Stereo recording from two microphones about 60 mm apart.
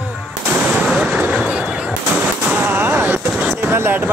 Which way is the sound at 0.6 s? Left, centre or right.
Centre.